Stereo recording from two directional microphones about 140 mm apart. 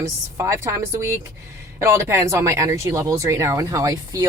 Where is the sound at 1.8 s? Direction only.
20° right (ahead or behind).